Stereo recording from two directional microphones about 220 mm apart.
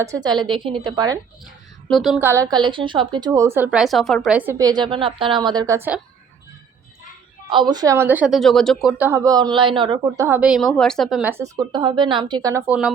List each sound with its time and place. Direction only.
0.0 s a woman's voice: 15° right (ahead or behind)
1.9 s a woman's voice: centre (ahead or behind)
7.5 s a woman's voice: 20° right (ahead or behind)
10.2 s a woman's voice: 5° right (ahead or behind)